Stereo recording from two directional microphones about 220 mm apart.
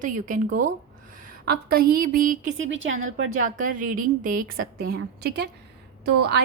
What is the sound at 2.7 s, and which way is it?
Speech, 60° right (ahead or behind).